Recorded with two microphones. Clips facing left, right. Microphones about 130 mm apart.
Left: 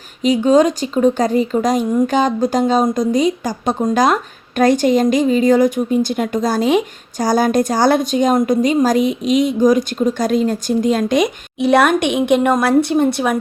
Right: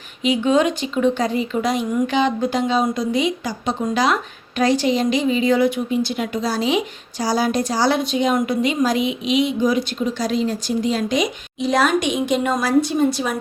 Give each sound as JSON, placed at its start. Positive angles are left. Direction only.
{"t": 0.2, "sound": "speech", "side_deg": 40}